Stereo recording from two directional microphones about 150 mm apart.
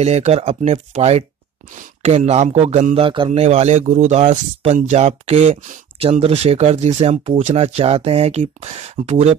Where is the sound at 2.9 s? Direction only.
35° right (ahead or behind).